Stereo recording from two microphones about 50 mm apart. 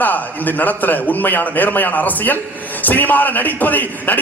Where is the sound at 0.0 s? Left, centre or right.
Left.